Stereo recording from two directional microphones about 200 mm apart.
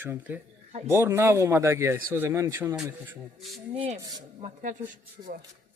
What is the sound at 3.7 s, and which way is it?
Speech, 25° right (ahead or behind).